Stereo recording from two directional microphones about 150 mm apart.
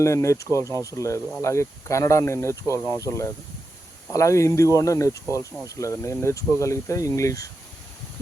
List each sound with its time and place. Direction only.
0.0 s speech: 20° left (ahead or behind)